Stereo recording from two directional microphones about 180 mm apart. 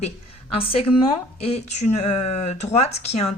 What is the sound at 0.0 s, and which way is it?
A woman's voice, 30° left (ahead or behind).